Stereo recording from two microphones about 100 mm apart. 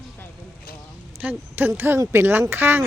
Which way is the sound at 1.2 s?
20° right (ahead or behind).